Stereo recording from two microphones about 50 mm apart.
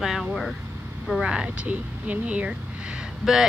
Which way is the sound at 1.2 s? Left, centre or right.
Centre.